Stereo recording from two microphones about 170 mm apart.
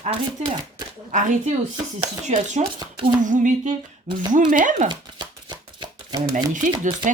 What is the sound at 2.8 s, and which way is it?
Speech, 30° right (ahead or behind).